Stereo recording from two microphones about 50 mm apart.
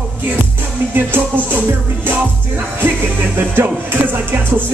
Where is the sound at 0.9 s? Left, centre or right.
Right.